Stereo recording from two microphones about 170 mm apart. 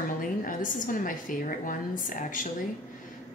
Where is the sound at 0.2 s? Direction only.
50° left (ahead or behind).